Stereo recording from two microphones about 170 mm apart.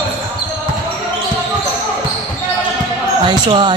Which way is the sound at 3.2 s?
25° right (ahead or behind).